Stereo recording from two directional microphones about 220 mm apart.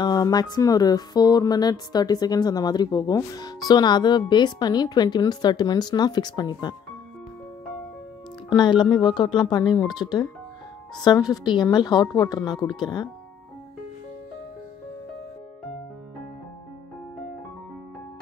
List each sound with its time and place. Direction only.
0.0 s speech: 20° left (ahead or behind)
8.5 s speech: 20° left (ahead or behind)